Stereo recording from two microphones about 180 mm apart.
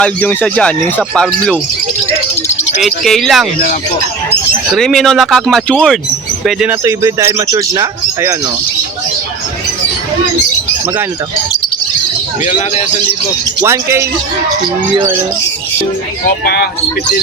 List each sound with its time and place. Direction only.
0.0 s speech: 5° left (ahead or behind)
2.8 s speech: centre (ahead or behind)
4.7 s speech: centre (ahead or behind); by 8.4 s 20° right (ahead or behind)
13.6 s speech: 15° right (ahead or behind)
16.2 s speech: 60° left (ahead or behind)